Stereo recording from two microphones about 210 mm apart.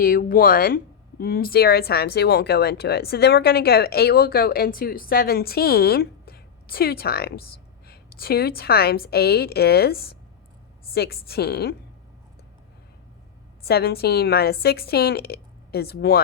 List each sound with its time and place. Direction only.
0.0 s speech: 45° left (ahead or behind)
13.7 s speech: 50° left (ahead or behind)